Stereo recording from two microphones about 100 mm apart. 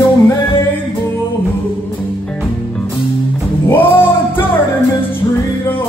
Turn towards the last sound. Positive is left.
turn(degrees=20)  # may be behind; listen again after turning